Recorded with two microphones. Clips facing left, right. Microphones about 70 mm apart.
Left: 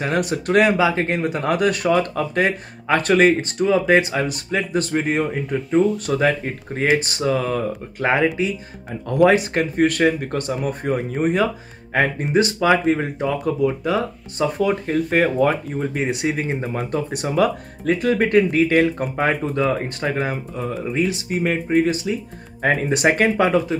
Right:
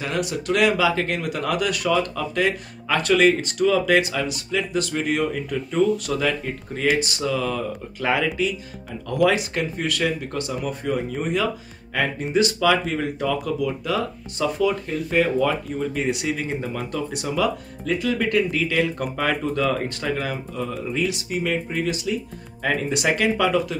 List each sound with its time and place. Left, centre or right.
0.0 s speech: left
5.7 s speech: centre
6.0 s speech: left
14.6 s speech: left
19.1 s speech: left